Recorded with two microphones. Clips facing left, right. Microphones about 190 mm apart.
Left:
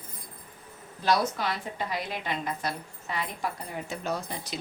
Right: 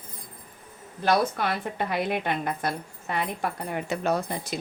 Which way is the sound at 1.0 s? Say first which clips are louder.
Right 3 dB; 55° right (ahead or behind).